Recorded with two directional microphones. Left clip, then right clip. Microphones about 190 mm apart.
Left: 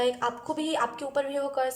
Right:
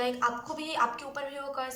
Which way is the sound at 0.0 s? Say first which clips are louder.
Left 2 dB; 40° left (ahead or behind).